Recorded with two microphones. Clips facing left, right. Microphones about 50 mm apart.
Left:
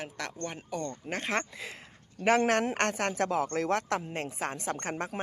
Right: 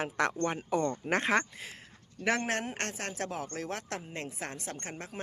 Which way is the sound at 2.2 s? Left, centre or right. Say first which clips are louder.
Left 6 dB; left.